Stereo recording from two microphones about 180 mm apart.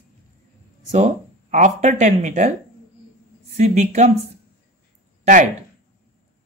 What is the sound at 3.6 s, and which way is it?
Speech, 40° right (ahead or behind).